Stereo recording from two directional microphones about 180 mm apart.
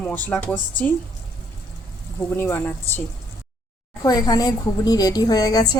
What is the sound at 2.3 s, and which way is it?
Speech, 15° left (ahead or behind).